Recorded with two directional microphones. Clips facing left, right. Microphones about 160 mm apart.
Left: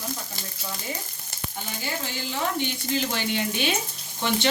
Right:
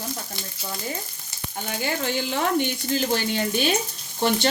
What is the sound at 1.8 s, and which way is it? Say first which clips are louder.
Stir: right 7 dB; 65° right (ahead or behind).